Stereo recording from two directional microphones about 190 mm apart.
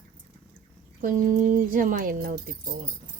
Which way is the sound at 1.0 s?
40° right (ahead or behind).